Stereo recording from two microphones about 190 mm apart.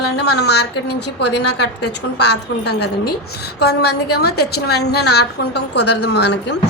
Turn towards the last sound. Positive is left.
turn(degrees=60)  # may be behind; listen again after turning